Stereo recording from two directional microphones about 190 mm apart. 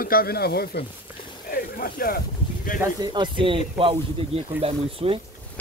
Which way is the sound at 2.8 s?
20° right (ahead or behind).